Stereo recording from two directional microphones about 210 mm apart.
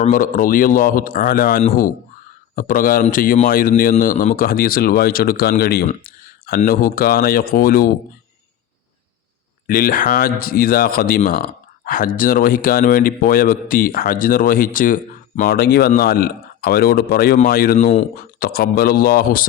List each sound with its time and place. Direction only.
0.0 s a man's voice: 40° left (ahead or behind)
9.6 s a man's voice: 45° left (ahead or behind)